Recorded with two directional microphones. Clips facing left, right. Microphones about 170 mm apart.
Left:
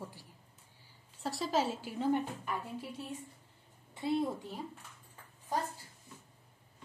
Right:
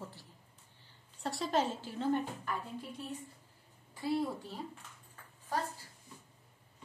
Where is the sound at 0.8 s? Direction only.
Centre (ahead or behind).